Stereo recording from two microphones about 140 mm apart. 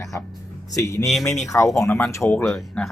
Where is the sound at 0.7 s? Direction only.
20° left (ahead or behind).